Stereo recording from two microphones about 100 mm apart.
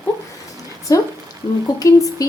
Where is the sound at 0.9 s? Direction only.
35° left (ahead or behind).